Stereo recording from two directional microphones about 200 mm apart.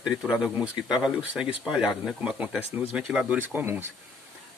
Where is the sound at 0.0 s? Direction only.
5° right (ahead or behind).